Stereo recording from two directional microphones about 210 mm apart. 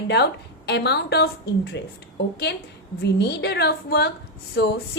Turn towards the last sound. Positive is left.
turn(degrees=50)  # may be behind; listen again after turning